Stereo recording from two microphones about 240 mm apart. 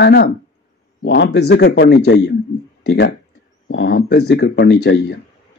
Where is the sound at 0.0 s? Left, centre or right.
Left.